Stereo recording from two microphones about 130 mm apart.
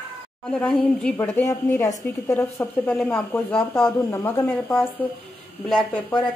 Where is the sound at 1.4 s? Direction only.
25° left (ahead or behind).